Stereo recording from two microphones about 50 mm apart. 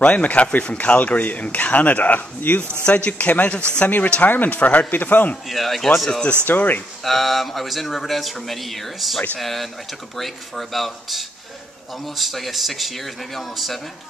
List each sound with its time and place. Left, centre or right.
0.0 s a man's voice: left
2.8 s a man's voice: left
3.8 s a man's voice: left
5.5 s speech: centre
6.4 s a man's voice: left
7.0 s speech: centre